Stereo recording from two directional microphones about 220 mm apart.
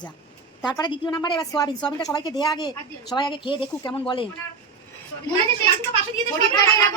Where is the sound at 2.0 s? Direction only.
15° left (ahead or behind).